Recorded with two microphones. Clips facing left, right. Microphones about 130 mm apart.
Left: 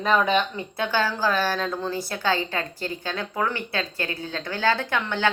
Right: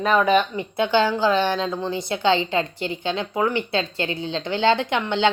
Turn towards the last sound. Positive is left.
turn(degrees=-20)  # may be behind; listen again after turning